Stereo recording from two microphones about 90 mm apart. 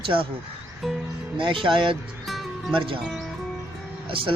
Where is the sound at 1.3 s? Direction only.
70° right (ahead or behind).